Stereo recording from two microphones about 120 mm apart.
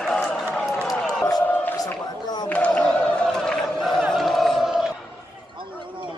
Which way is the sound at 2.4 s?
10° left (ahead or behind).